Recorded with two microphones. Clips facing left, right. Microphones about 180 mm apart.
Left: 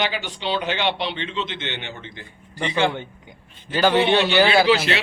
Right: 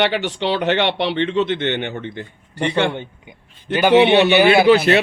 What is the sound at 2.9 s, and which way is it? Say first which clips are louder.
Speech: right 3 dB; 20° right (ahead or behind).